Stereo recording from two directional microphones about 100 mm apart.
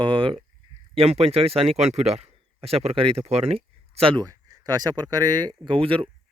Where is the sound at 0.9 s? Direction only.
90° right; by 4.2 s 70° right (ahead or behind).